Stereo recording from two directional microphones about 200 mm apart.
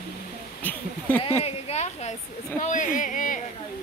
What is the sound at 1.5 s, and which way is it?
Speech, 30° left (ahead or behind).